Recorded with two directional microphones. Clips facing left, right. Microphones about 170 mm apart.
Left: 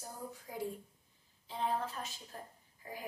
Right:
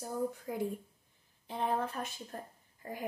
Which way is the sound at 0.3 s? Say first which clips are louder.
Right 5 dB; 55° right (ahead or behind).